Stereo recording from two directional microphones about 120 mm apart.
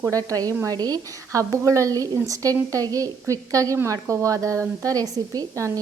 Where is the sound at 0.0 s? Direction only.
30° right (ahead or behind).